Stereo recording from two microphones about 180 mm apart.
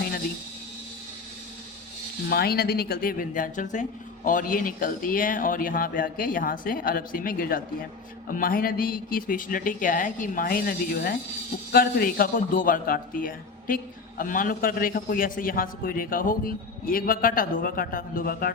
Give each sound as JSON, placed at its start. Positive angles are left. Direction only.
{"t": 2.3, "sound": "a man's voice", "side_deg": 60}